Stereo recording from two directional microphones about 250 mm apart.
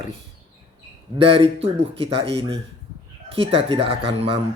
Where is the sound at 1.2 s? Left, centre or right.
Right.